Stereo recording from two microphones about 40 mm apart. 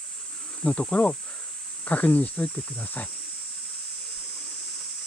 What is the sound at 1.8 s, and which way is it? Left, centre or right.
Speech, left.